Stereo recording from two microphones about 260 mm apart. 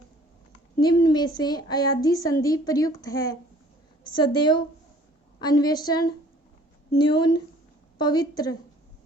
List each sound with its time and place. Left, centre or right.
0.8 s speech: centre